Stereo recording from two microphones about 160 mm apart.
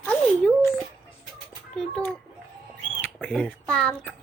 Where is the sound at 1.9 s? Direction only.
10° left (ahead or behind).